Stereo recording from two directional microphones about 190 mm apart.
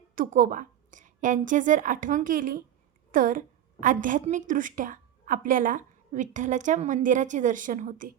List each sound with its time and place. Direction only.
0.2 s a woman's voice: 45° right (ahead or behind)